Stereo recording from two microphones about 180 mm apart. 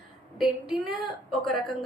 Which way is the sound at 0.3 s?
5° right (ahead or behind).